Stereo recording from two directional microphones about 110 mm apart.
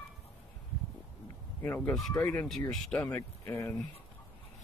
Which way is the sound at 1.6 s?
15° left (ahead or behind).